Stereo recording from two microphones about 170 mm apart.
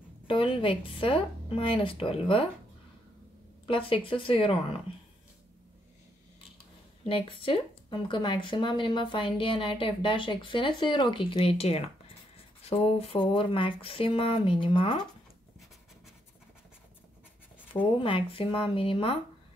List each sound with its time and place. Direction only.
0.3 s speech: 30° left (ahead or behind)
3.6 s speech: 30° left (ahead or behind)
7.1 s speech: 30° left (ahead or behind)
18.0 s speech: 30° left (ahead or behind)